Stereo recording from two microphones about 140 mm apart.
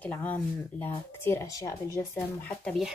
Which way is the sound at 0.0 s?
10° left (ahead or behind).